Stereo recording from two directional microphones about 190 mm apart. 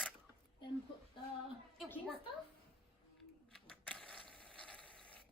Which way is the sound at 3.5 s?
5° left (ahead or behind).